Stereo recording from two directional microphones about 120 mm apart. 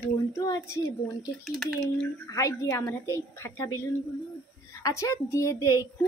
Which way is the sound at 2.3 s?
25° left (ahead or behind).